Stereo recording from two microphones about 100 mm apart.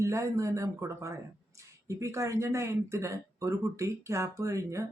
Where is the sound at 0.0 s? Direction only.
30° right (ahead or behind).